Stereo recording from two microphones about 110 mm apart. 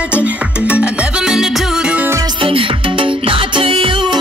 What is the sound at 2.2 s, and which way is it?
Music, 55° right (ahead or behind).